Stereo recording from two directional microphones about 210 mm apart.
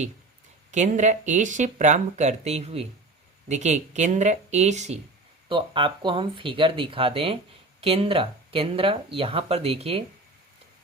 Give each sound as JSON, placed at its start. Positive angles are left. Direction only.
{"t": 0.7, "sound": "speech", "side_deg": -35}